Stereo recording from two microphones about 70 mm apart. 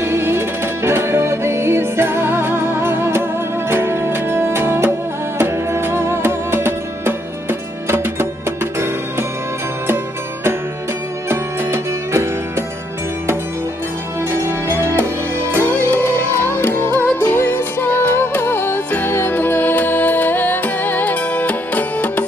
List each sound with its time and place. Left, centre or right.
0.0 s music: right
11.2 s music: right
14.3 s music: right
16.3 s music: left